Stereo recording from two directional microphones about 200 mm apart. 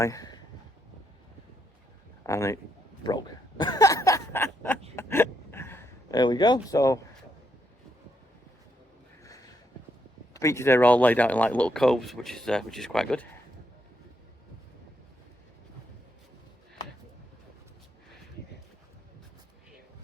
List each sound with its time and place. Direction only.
0.0 s speech: 15° left (ahead or behind)
2.2 s a man's voice: 15° left (ahead or behind)
3.0 s a sound: 20° left (ahead or behind)
10.3 s speech: 15° left (ahead or behind)